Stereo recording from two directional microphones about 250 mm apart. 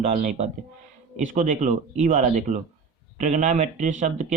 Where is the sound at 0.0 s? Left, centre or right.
Right.